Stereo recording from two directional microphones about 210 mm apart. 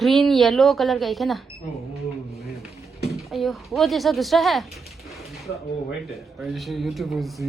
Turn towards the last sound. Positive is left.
turn(degrees=0)  # may be behind; listen again after turning